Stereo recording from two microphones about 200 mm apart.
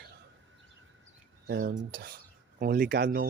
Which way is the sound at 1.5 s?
45° right (ahead or behind).